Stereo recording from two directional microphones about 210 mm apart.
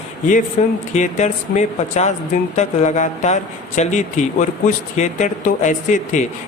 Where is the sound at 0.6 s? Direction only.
35° left (ahead or behind).